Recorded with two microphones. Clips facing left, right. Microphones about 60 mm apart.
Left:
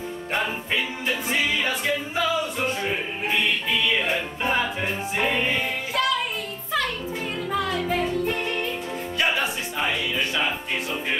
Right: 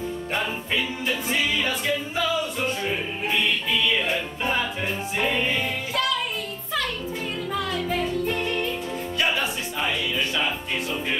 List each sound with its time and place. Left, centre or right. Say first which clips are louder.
0.3 s music: left 2 dB; left
7.5 s music: left 2 dB; left